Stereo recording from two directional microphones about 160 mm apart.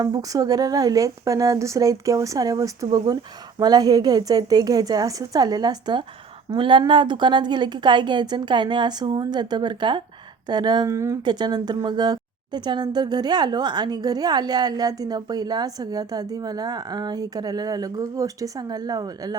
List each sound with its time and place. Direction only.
0.0 s a woman's voice: 25° right (ahead or behind)